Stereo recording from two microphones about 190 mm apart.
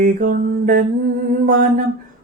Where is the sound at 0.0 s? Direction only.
45° right (ahead or behind).